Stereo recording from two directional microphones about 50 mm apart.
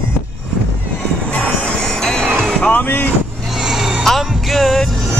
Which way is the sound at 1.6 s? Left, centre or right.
Centre.